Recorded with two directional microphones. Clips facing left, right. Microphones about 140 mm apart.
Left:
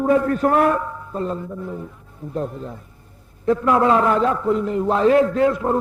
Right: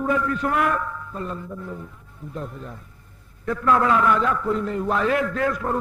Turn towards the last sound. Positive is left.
turn(degrees=25)  # may be behind; listen again after turning